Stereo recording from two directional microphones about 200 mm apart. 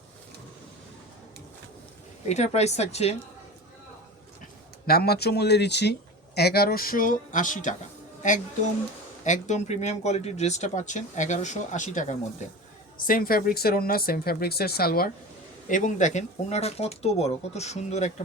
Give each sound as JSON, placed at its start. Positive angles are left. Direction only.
{"t": 2.2, "sound": "speech", "side_deg": 35}
{"t": 4.9, "sound": "speech", "side_deg": 50}
{"t": 15.7, "sound": "speech", "side_deg": 40}